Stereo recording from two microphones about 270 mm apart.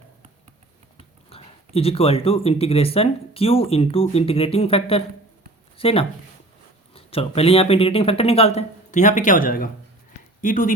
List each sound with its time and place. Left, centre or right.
1.3 s speech: left